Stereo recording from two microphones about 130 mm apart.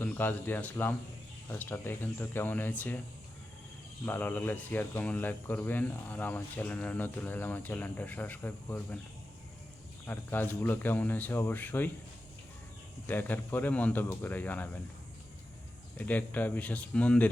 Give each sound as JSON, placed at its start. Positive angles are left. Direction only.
{"t": 0.0, "sound": "speech", "side_deg": 15}
{"t": 4.0, "sound": "speech", "side_deg": 15}
{"t": 10.1, "sound": "speech", "side_deg": 15}
{"t": 13.1, "sound": "speech", "side_deg": 15}
{"t": 16.0, "sound": "speech", "side_deg": 10}